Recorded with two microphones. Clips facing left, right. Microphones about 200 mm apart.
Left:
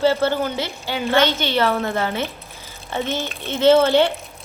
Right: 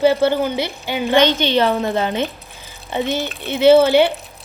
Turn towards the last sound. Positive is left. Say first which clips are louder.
# right 3 dB
turn(degrees=-15)  # may be behind; listen again after turning